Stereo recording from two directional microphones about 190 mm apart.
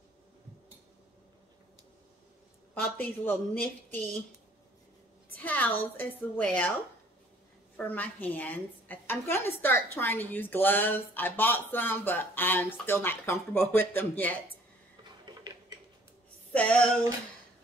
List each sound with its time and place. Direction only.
2.7 s a woman's voice: 10° left (ahead or behind)
5.4 s a woman's voice: 10° left (ahead or behind)
7.7 s a woman's voice: 10° left (ahead or behind)
16.5 s a sound: 5° left (ahead or behind)